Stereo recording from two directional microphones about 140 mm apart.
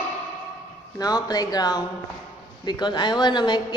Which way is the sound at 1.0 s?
30° left (ahead or behind).